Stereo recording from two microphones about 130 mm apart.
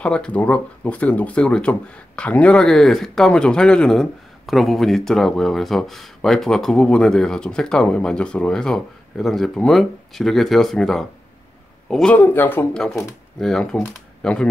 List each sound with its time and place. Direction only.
0.0 s a man's voice: 10° left (ahead or behind)
12.7 s speech: 5° left (ahead or behind)